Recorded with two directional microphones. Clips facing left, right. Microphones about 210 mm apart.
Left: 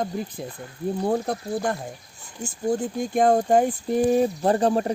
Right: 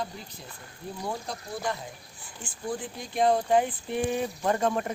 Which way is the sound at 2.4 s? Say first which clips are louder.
Left 9 dB; 45° left (ahead or behind).